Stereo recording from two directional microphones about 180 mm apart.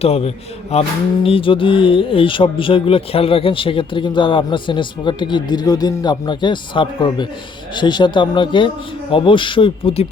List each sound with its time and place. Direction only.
0.0 s a man's voice: 35° left (ahead or behind)